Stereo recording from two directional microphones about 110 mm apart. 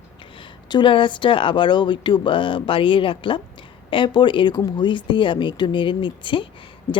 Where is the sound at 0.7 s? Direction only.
45° left (ahead or behind).